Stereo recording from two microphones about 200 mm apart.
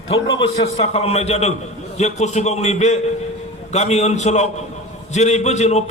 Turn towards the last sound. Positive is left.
turn(degrees=35)  # may be behind; listen again after turning